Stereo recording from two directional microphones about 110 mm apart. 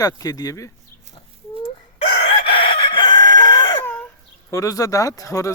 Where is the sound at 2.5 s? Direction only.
50° left (ahead or behind).